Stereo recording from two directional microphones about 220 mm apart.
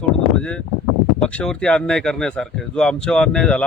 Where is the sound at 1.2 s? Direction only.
5° left (ahead or behind).